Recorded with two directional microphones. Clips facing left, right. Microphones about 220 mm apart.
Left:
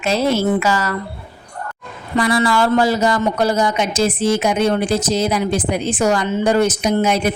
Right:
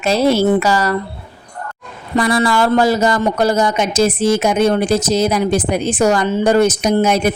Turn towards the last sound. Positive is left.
turn(degrees=-45)  # may be behind; listen again after turning